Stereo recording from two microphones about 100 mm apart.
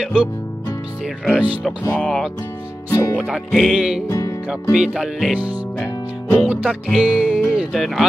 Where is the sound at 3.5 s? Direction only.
5° left (ahead or behind).